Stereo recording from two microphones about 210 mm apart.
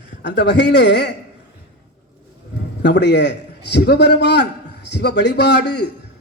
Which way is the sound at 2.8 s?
55° left (ahead or behind).